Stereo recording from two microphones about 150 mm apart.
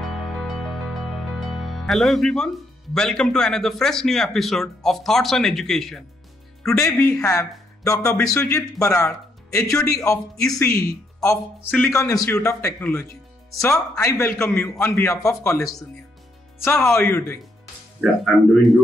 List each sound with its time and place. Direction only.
0.0 s music: centre (ahead or behind)
6.8 s speech: 15° left (ahead or behind)
11.2 s a man's voice: 15° left (ahead or behind)
18.2 s speech: centre (ahead or behind)